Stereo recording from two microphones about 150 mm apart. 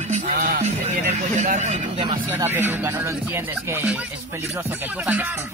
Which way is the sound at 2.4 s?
15° right (ahead or behind).